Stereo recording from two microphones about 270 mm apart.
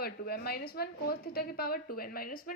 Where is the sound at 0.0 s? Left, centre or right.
Left.